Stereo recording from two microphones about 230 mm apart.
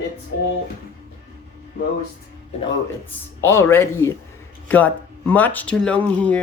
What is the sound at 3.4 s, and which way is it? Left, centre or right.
Speech, centre.